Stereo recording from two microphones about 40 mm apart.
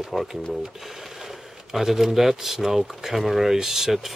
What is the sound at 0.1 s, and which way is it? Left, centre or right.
Speech, centre.